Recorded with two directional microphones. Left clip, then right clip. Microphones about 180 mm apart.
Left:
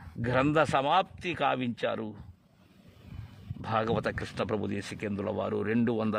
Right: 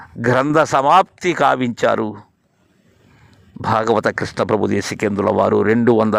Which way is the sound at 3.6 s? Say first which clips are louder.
Right 14 dB; 40° right (ahead or behind).